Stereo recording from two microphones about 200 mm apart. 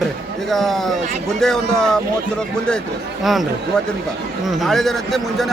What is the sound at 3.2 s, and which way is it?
Speech, centre (ahead or behind).